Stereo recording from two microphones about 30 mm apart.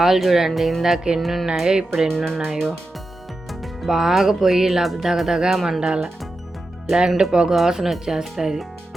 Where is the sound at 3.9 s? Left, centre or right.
Centre.